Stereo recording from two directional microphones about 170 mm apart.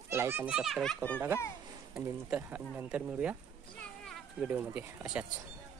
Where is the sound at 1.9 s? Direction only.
10° right (ahead or behind).